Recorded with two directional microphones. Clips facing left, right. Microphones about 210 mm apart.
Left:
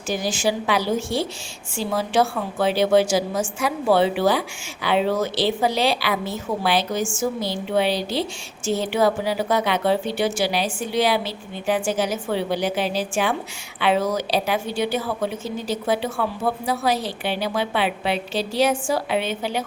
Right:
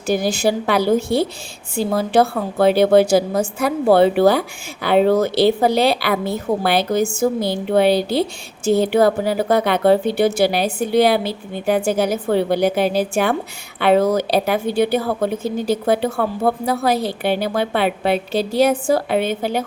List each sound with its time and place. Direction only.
0.1 s a woman's voice: 55° right (ahead or behind)